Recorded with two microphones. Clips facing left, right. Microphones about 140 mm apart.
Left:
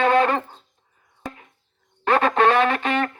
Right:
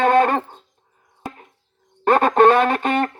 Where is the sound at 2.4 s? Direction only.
45° right (ahead or behind).